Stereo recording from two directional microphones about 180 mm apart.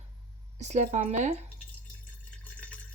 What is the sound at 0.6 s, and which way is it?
Speech, 40° right (ahead or behind).